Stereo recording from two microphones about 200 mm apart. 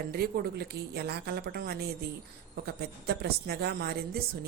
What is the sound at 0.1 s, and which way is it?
Speech, 50° right (ahead or behind).